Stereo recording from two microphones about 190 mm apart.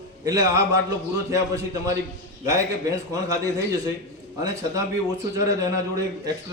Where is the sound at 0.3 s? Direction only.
15° right (ahead or behind).